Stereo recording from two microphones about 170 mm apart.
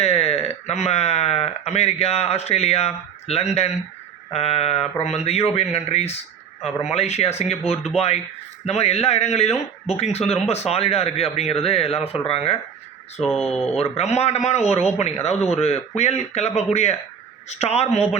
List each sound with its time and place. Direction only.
0.0 s a man's voice: 35° left (ahead or behind)
13.6 s a man's voice: 35° left (ahead or behind)